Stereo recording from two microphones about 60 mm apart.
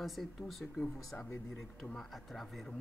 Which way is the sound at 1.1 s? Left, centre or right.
Left.